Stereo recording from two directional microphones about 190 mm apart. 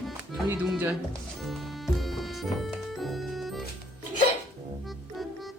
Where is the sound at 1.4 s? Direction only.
Centre (ahead or behind).